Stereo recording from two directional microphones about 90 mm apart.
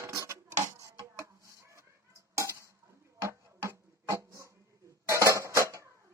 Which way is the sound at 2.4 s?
35° right (ahead or behind).